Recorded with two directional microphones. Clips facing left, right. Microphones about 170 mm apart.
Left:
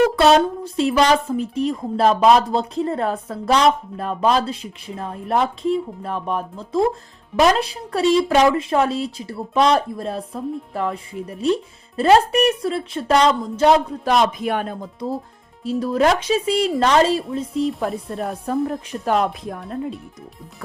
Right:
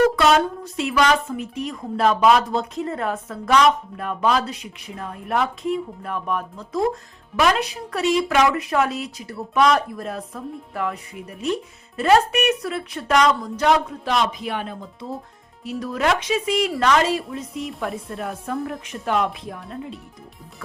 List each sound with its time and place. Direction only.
0.2 s speech: 35° left (ahead or behind)
14.0 s speech: 50° left (ahead or behind)
15.6 s speech: 30° left (ahead or behind)